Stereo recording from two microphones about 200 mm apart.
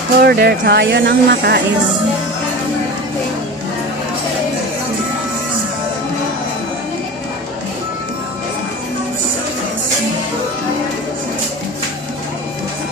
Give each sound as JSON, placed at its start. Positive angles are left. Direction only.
{"t": 0.2, "sound": "speech", "side_deg": -50}